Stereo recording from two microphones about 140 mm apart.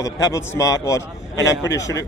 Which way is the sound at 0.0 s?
25° left (ahead or behind).